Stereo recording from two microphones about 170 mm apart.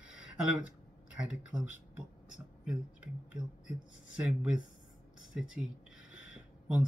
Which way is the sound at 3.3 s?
25° right (ahead or behind).